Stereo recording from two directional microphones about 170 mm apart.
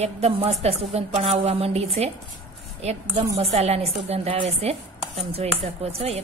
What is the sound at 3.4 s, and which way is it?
Chopping, 35° right (ahead or behind).